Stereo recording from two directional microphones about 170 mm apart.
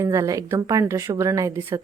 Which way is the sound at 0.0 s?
20° right (ahead or behind).